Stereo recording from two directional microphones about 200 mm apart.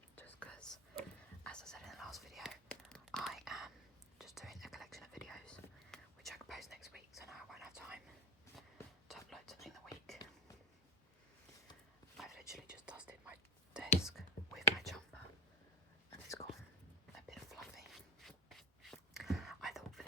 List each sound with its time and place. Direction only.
0.2 s whispering: 5° left (ahead or behind)
9.0 s whispering: centre (ahead or behind)
12.1 s whispering: centre (ahead or behind)
16.0 s whispering: 15° left (ahead or behind)
17.2 s a sound: centre (ahead or behind)